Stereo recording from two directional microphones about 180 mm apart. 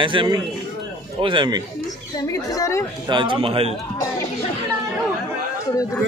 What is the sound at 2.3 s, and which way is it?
Speech, 20° left (ahead or behind).